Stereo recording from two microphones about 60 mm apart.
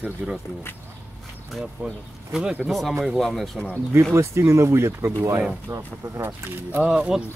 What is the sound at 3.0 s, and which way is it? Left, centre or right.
Speech, centre.